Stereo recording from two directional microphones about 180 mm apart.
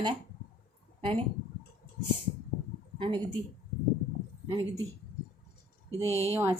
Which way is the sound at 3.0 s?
25° right (ahead or behind).